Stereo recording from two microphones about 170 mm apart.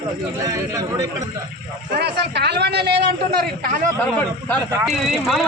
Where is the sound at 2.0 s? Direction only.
80° right.